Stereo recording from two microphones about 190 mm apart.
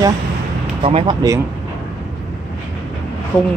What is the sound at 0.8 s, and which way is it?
Speech, 30° right (ahead or behind).